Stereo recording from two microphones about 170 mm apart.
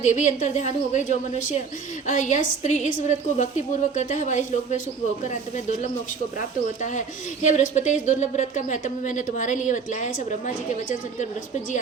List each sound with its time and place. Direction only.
0.0 s a woman's voice: 45° left (ahead or behind)
7.4 s a woman's voice: 45° left (ahead or behind)